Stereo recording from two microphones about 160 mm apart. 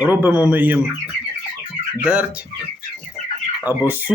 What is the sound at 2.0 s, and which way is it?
Speech, 5° right (ahead or behind).